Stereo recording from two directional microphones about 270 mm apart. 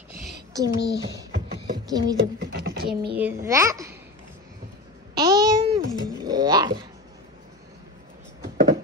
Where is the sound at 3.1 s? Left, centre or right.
Centre.